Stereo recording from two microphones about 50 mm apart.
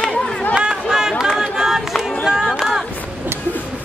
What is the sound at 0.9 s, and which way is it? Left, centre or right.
Speech, centre.